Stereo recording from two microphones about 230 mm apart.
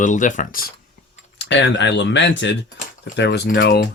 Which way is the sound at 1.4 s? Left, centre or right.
Left.